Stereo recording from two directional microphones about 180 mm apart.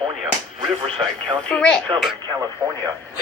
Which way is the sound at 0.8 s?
30° right (ahead or behind).